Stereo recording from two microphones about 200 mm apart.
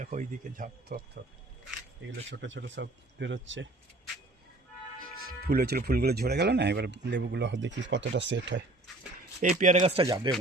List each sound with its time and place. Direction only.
0.0 s speech: 40° right (ahead or behind)
2.3 s speech: 65° right (ahead or behind)
5.2 s speech: 50° right (ahead or behind)
9.4 s speech: 40° right (ahead or behind)